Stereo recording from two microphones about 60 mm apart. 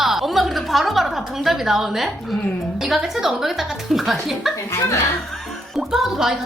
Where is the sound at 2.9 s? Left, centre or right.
Centre.